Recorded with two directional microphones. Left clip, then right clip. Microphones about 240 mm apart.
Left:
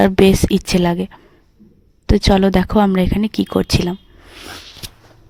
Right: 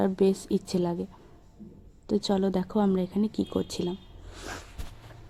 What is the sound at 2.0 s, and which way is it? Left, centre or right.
Speech, left.